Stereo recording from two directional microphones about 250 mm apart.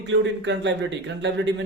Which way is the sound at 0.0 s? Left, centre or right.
Right.